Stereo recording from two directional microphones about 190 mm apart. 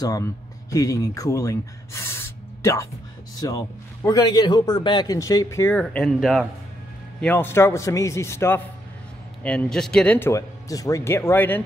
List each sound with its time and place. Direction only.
0.0 s a man's voice: 20° left (ahead or behind)